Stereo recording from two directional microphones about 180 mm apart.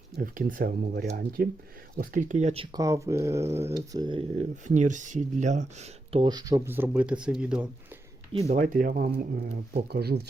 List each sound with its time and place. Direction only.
0.2 s speech: 50° right (ahead or behind)
2.7 s speech: 15° right (ahead or behind)
3.9 s speech: 25° right (ahead or behind); by 7.7 s 5° right (ahead or behind)
8.3 s speech: 35° right (ahead or behind)
8.5 s speech: 50° right (ahead or behind)